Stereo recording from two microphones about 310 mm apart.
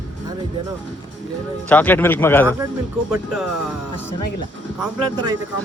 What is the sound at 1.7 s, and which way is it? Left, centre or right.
Speech, centre.